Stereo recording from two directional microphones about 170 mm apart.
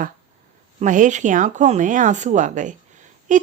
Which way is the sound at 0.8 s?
50° right (ahead or behind).